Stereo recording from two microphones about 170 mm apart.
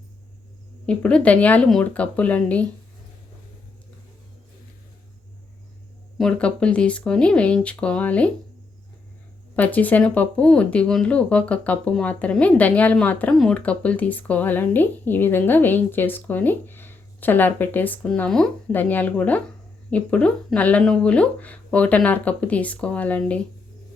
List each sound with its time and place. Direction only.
0.9 s speech: 5° left (ahead or behind)
6.1 s speech: 5° left (ahead or behind)
9.6 s speech: 10° left (ahead or behind)